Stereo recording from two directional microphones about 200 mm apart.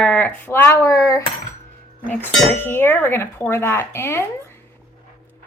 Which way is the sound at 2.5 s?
10° left (ahead or behind).